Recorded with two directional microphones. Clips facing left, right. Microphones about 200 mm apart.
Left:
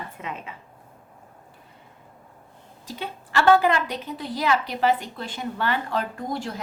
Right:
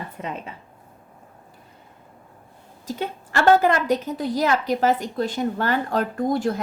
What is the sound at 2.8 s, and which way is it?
A woman's voice, 45° right (ahead or behind).